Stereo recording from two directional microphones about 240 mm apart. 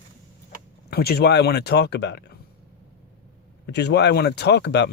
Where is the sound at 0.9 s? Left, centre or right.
Left.